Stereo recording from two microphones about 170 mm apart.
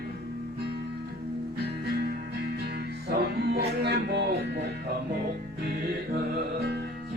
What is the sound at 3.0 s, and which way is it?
Music, 75° right (ahead or behind).